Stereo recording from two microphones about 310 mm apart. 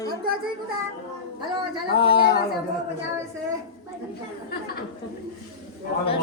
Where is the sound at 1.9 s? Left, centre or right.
Centre.